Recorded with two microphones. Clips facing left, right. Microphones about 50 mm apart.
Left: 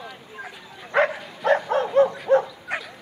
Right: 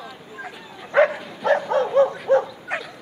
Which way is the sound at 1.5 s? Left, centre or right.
Left.